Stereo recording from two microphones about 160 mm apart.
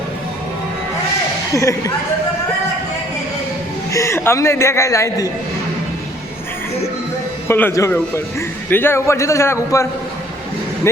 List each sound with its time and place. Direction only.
3.9 s a man's voice: 15° left (ahead or behind)
7.4 s a man's voice: 15° left (ahead or behind)